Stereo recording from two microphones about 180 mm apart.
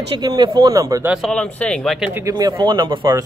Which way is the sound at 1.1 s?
5° left (ahead or behind).